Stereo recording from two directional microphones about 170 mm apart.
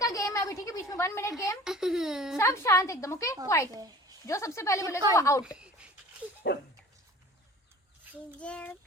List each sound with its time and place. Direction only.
0.0 s a sound: 20° left (ahead or behind)
1.6 s speech: 5° right (ahead or behind)
2.4 s a woman's voice: 15° left (ahead or behind)
3.7 s a woman's voice: 20° right (ahead or behind)
4.3 s a woman's voice: 15° left (ahead or behind)
5.4 s speech: 5° right (ahead or behind)
6.4 s speech: 70° left (ahead or behind)
8.4 s a woman's voice: 5° left (ahead or behind)